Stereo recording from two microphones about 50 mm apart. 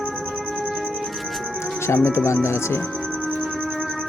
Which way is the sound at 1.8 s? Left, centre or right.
Left.